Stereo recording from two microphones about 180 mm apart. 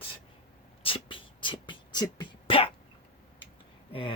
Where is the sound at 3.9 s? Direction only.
30° left (ahead or behind).